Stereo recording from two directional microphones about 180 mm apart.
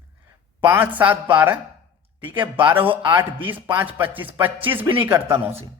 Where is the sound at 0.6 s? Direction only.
10° right (ahead or behind).